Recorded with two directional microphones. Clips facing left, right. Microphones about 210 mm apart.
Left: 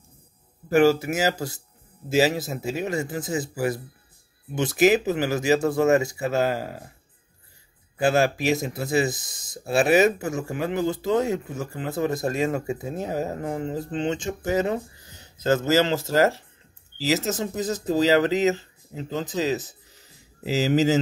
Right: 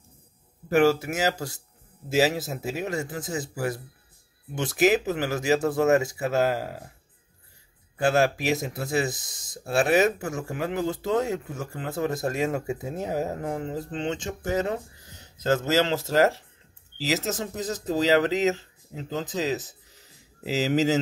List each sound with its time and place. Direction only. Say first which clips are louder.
0.7 s speech: left 2 dB; centre (ahead or behind)
8.0 s speech: left 1 dB; 5° left (ahead or behind)